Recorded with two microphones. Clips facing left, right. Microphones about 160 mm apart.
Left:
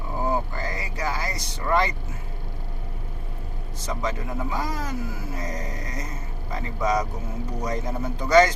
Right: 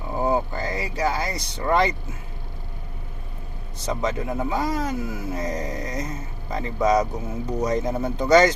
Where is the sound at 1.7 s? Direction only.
20° right (ahead or behind).